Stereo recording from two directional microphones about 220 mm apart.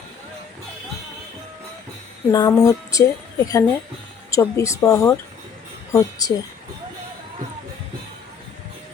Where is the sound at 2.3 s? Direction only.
15° left (ahead or behind).